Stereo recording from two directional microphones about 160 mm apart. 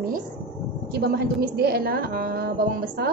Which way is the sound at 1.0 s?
80° right.